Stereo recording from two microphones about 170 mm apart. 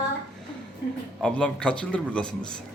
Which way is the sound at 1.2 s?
5° left (ahead or behind).